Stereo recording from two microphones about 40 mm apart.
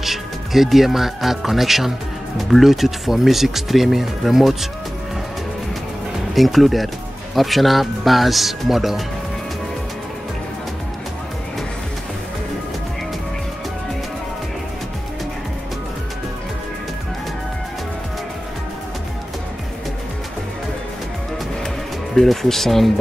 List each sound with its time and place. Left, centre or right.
0.0 s speech: centre
6.3 s speech: centre
22.1 s speech: centre